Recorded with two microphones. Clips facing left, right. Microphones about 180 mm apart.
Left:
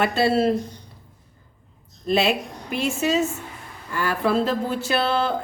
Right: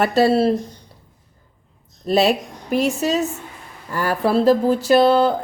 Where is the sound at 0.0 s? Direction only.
40° right (ahead or behind).